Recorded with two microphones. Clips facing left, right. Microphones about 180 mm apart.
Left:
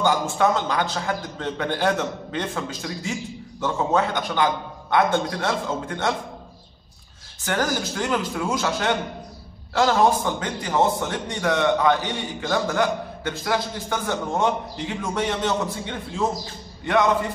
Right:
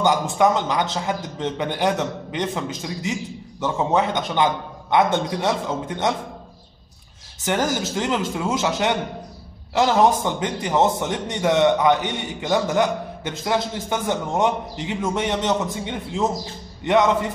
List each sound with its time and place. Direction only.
0.0 s a man's voice: 15° right (ahead or behind)
7.4 s a man's voice: 20° right (ahead or behind)